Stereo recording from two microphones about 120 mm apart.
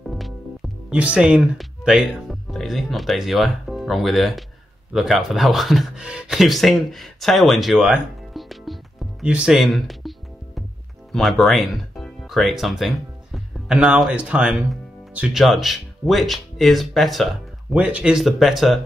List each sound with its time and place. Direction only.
0.0 s music: centre (ahead or behind)
0.8 s speech: 10° right (ahead or behind)
9.2 s music: 10° right (ahead or behind)
11.1 s speech: centre (ahead or behind)